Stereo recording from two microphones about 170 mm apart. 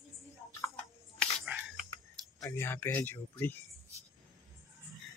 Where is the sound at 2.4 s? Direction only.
15° left (ahead or behind).